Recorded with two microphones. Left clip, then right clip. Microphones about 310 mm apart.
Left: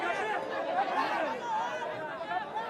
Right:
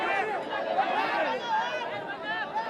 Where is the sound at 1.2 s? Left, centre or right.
Right.